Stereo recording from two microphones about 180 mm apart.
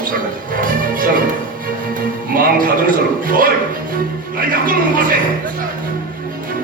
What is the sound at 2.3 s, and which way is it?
A man's voice, 50° right (ahead or behind).